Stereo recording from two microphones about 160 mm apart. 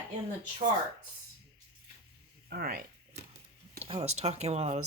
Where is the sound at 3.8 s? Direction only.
40° right (ahead or behind).